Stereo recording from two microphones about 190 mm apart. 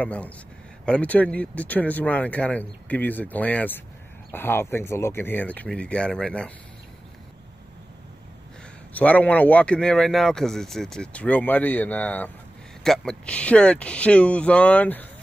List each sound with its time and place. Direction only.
0.0 s speech: 5° left (ahead or behind)
8.9 s speech: 5° left (ahead or behind)